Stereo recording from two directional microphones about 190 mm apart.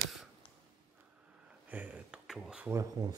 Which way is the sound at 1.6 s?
10° right (ahead or behind).